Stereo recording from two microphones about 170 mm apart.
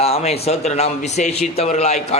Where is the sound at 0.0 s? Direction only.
40° left (ahead or behind).